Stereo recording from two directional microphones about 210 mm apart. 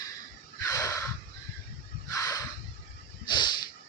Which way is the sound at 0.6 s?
15° left (ahead or behind).